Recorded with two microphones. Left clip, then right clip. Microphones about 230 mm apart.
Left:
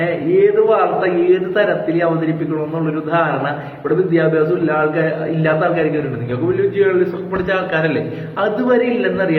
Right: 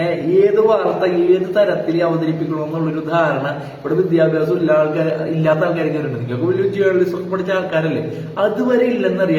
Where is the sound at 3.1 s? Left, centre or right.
Centre.